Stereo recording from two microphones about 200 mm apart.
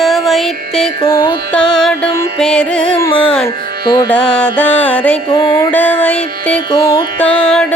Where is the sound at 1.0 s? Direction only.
20° left (ahead or behind).